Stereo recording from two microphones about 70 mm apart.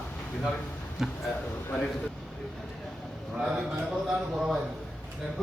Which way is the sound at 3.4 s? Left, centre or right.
Centre.